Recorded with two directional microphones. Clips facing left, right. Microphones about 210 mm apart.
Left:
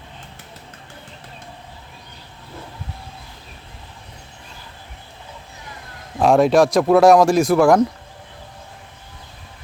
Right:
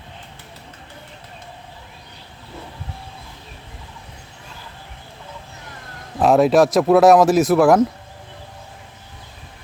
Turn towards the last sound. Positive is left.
turn(degrees=-5)  # may be behind; listen again after turning